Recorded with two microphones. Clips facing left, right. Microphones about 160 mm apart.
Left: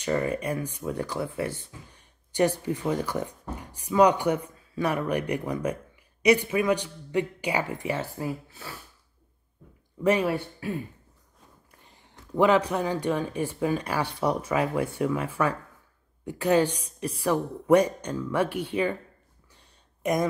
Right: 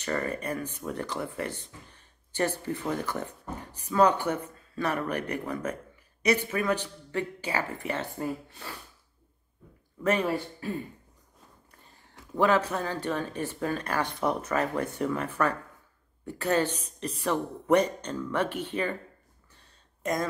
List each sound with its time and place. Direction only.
0.0 s speech: 10° left (ahead or behind)
10.0 s speech: 10° left (ahead or behind)
12.4 s speech: 15° left (ahead or behind)
19.5 s a sound: 15° left (ahead or behind)